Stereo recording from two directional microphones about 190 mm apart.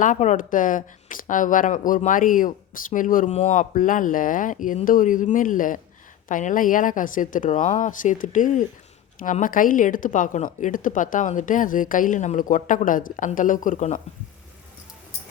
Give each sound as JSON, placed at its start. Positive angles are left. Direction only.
{"t": 0.0, "sound": "speech", "side_deg": 40}